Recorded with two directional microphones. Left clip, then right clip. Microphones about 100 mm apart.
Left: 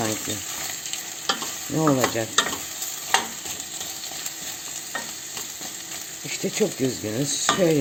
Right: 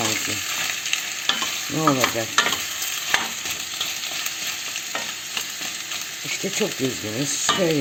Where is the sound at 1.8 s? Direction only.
10° left (ahead or behind).